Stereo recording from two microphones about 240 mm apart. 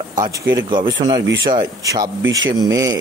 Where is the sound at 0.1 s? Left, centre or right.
Centre.